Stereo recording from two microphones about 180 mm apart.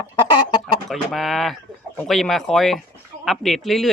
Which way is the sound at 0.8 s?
Centre (ahead or behind).